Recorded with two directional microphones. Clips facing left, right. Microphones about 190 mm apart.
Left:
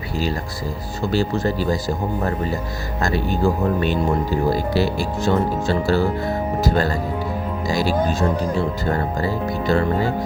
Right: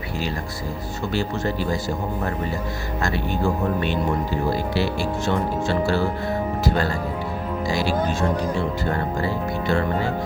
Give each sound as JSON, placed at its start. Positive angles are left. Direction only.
{"t": 1.1, "sound": "speech", "side_deg": 35}
{"t": 3.0, "sound": "speech", "side_deg": 35}
{"t": 9.2, "sound": "speech", "side_deg": 40}